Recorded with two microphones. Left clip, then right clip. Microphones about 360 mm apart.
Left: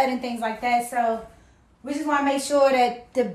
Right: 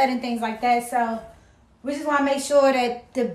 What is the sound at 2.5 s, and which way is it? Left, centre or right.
Speech, centre.